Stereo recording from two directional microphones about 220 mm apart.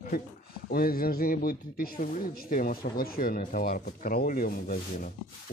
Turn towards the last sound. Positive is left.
turn(degrees=40)  # may be behind; listen again after turning